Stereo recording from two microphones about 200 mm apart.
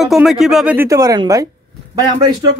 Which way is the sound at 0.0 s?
Centre (ahead or behind).